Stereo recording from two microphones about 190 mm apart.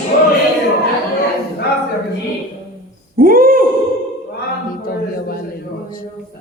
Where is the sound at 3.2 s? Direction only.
50° right (ahead or behind).